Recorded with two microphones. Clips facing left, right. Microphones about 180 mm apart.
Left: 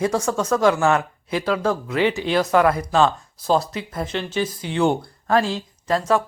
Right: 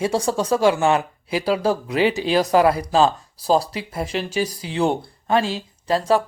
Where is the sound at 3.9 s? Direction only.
10° right (ahead or behind).